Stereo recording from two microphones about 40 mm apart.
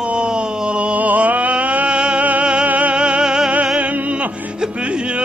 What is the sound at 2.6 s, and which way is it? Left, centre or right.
Music, right.